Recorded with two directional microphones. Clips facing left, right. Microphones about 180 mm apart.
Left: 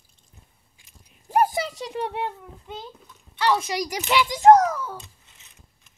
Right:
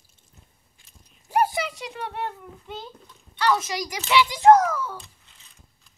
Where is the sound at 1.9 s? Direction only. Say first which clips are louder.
Left 4 dB; 20° left (ahead or behind).